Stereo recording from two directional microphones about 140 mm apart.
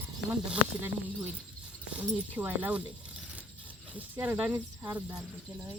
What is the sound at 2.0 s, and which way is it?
Speech, 10° right (ahead or behind).